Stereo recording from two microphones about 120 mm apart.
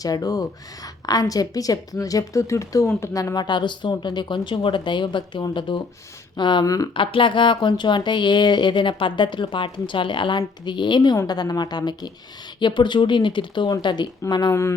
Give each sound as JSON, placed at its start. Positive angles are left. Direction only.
{"t": 0.0, "sound": "a woman's voice", "side_deg": 30}
{"t": 6.9, "sound": "a woman's voice", "side_deg": 45}
{"t": 14.5, "sound": "speech", "side_deg": 20}